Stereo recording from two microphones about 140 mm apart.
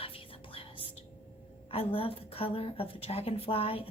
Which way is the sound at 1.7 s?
45° left (ahead or behind).